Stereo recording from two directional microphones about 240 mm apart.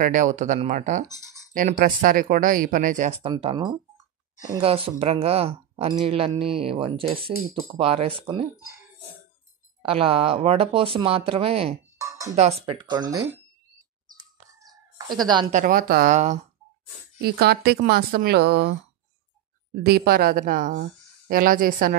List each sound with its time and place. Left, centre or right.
0.0 s speech: right
9.8 s speech: right
12.0 s music: centre
12.3 s speech: right
14.1 s a sound: centre
15.5 s speech: right
17.2 s speech: right
19.7 s speech: right